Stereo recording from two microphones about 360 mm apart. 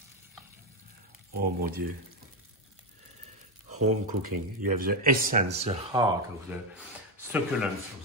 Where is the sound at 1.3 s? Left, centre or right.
Right.